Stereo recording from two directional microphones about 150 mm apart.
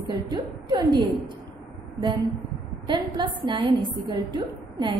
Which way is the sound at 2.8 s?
30° right (ahead or behind).